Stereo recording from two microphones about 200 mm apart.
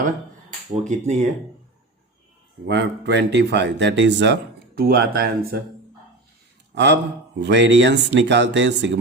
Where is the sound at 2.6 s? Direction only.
60° right (ahead or behind).